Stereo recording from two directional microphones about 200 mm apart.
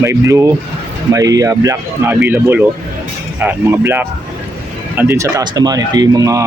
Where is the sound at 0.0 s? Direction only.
15° right (ahead or behind).